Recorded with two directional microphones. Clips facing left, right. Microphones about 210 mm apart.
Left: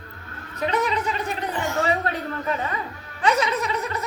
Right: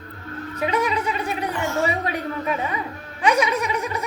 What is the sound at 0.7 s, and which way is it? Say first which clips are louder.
Gargling: even; 10° right (ahead or behind).